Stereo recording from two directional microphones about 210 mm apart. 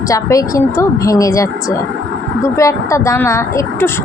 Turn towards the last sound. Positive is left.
turn(degrees=15)  # may be behind; listen again after turning